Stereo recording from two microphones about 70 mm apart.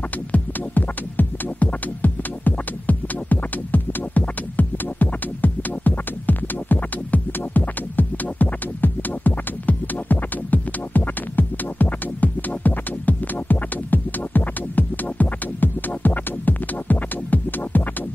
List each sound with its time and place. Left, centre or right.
0.3 s music: left